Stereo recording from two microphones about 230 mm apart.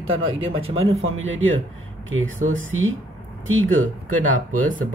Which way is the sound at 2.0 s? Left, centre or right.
Right.